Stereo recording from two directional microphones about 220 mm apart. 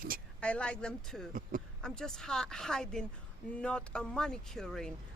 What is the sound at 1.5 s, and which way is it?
Speech, 35° right (ahead or behind).